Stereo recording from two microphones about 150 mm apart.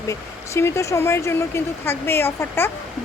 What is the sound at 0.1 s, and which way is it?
A woman's voice, 20° left (ahead or behind).